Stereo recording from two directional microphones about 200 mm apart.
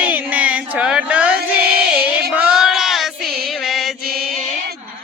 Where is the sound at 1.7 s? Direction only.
5° right (ahead or behind).